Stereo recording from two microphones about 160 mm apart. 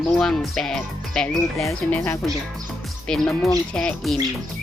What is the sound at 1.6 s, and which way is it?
Speech, 15° left (ahead or behind).